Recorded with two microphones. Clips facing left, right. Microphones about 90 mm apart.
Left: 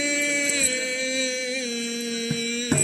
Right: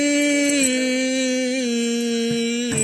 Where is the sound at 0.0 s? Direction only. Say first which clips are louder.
Right 9 dB; 70° right (ahead or behind).